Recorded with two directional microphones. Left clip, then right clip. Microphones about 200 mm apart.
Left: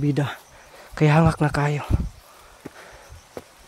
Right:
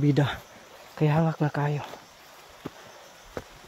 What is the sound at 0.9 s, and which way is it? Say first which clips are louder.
Speech: left 7 dB; 30° left (ahead or behind).